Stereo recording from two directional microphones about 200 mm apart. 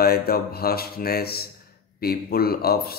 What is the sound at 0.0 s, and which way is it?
Speech, 50° left (ahead or behind).